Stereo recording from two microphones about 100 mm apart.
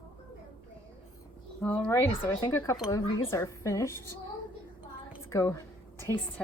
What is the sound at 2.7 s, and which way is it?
Speech, 30° left (ahead or behind).